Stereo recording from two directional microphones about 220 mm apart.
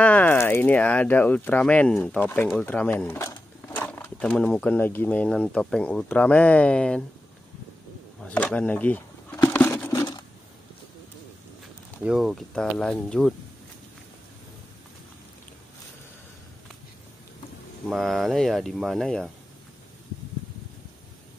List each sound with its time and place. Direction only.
0.0 s speech: 5° left (ahead or behind)
8.2 s a sound: 5° left (ahead or behind)
12.0 s speech: 5° right (ahead or behind)
17.8 s speech: centre (ahead or behind)